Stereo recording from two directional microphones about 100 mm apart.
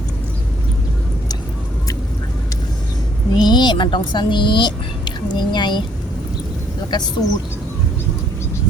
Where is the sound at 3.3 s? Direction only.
45° left (ahead or behind).